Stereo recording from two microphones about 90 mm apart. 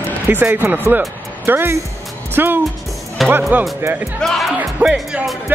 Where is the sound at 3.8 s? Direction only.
25° right (ahead or behind).